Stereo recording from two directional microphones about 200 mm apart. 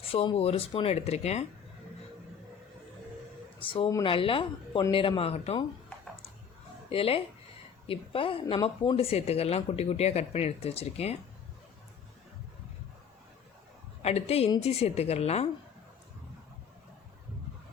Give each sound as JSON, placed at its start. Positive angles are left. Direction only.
{"t": 0.0, "sound": "speech", "side_deg": 30}
{"t": 3.6, "sound": "speech", "side_deg": 25}
{"t": 6.9, "sound": "speech", "side_deg": 30}
{"t": 14.0, "sound": "speech", "side_deg": 30}